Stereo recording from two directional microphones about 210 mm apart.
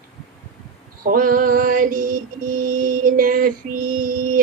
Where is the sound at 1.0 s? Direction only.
45° right (ahead or behind).